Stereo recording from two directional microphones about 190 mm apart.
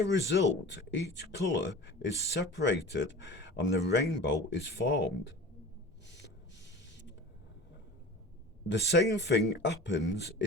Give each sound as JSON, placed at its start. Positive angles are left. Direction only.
{"t": 0.0, "sound": "speech", "side_deg": 65}
{"t": 6.1, "sound": "rub", "side_deg": 70}
{"t": 8.6, "sound": "speech", "side_deg": 65}